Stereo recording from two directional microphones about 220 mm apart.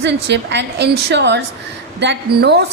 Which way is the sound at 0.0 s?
50° right (ahead or behind).